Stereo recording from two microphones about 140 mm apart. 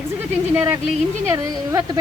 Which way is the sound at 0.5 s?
10° right (ahead or behind).